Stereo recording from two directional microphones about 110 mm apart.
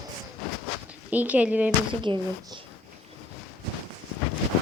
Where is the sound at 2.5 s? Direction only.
40° right (ahead or behind).